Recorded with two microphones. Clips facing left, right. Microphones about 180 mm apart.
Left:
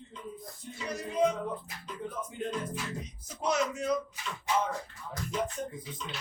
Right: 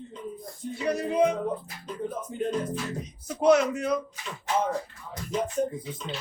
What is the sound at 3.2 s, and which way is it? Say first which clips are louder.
Speech: right 10 dB; 60° right (ahead or behind).